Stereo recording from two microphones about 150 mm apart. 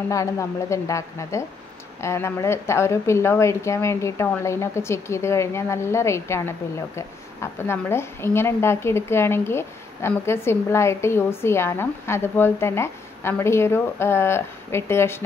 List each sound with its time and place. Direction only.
0.1 s a woman's voice: 20° left (ahead or behind)
7.5 s a woman's voice: 15° left (ahead or behind)